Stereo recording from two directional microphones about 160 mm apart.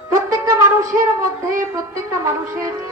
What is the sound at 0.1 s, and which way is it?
Wind instrument, 20° right (ahead or behind).